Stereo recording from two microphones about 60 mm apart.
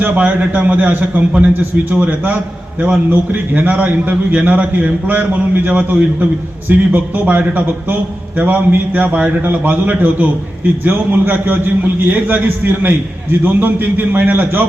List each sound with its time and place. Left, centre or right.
0.0 s a man's voice: right